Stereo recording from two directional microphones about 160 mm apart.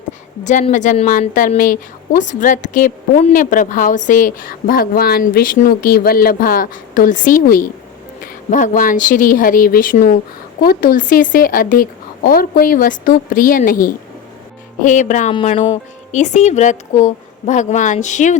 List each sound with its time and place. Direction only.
0.7 s a woman's voice: 50° left (ahead or behind)